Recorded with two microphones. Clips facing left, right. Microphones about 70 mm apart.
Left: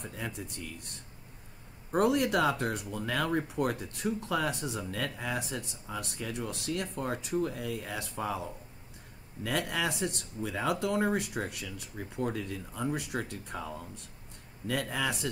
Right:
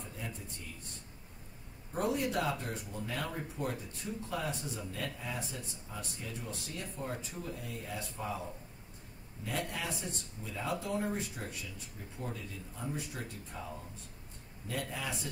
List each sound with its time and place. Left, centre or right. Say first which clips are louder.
0.4 s speech: left 7 dB; left
1.9 s speech: left 7 dB; left